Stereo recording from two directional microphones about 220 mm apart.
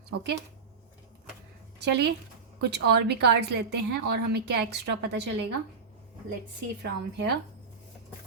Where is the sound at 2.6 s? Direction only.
50° right (ahead or behind).